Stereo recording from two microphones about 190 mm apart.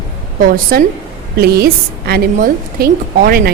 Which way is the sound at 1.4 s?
55° right (ahead or behind).